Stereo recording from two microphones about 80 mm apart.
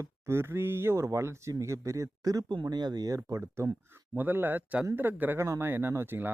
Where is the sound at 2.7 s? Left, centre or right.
Right.